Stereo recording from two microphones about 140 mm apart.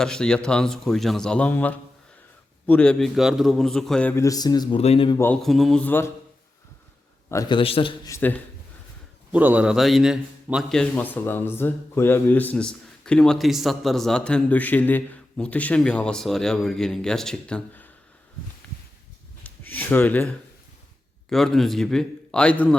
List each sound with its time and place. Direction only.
0.0 s a man's voice: 5° left (ahead or behind)
3.2 s a man's voice: 5° right (ahead or behind)
4.1 s speech: 25° left (ahead or behind)
4.8 s speech: 50° left (ahead or behind)
5.1 s a man's voice: 15° left (ahead or behind)
5.4 s a man's voice: centre (ahead or behind)
7.4 s a man's voice: 40° left (ahead or behind)
9.3 s a man's voice: 10° right (ahead or behind); by 17.9 s 10° left (ahead or behind)
19.6 s a man's voice: 10° left (ahead or behind)